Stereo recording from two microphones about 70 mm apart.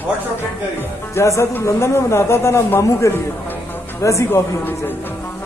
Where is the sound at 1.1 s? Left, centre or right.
Left.